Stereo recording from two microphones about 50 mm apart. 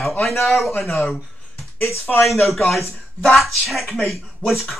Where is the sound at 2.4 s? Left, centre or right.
Centre.